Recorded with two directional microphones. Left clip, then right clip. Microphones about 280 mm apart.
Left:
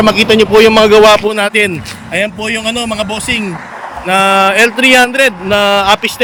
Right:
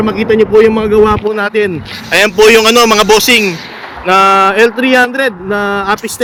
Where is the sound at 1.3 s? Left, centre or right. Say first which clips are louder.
Left 1 dB; centre.